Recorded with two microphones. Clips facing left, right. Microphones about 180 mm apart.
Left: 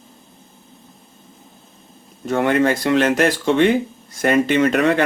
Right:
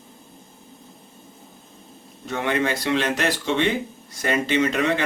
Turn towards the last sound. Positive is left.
turn(degrees=55)  # may be behind; listen again after turning